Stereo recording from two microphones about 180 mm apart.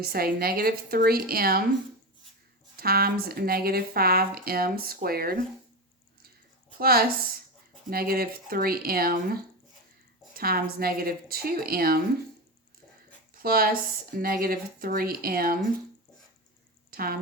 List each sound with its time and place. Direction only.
0.0 s speech: 55° right (ahead or behind)
2.7 s speech: 60° right (ahead or behind)
6.7 s speech: 55° right (ahead or behind)
13.3 s speech: 55° right (ahead or behind)
16.9 s speech: 55° right (ahead or behind)